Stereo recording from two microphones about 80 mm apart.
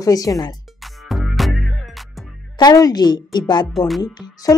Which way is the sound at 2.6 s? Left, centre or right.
Left.